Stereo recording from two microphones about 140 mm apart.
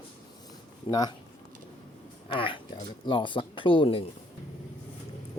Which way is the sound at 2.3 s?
40° left (ahead or behind).